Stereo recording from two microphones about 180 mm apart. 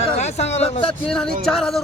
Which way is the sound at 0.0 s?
35° left (ahead or behind).